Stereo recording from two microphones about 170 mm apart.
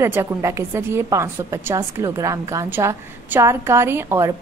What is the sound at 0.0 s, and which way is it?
A woman's voice, 15° right (ahead or behind).